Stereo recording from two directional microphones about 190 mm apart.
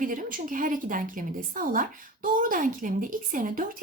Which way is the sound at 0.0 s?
45° right (ahead or behind).